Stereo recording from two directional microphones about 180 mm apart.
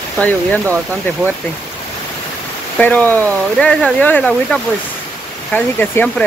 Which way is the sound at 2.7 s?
10° left (ahead or behind).